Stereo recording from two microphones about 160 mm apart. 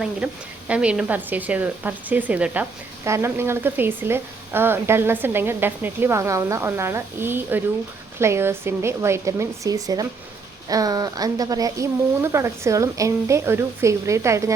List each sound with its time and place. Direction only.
0.2 s speech: 10° right (ahead or behind)